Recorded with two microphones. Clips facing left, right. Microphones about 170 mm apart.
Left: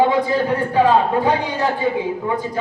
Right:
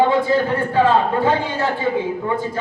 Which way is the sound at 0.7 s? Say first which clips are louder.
Left 1 dB; 15° left (ahead or behind).